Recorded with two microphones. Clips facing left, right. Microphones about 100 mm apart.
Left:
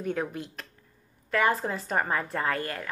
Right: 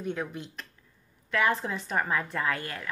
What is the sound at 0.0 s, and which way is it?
Speech, 45° left (ahead or behind).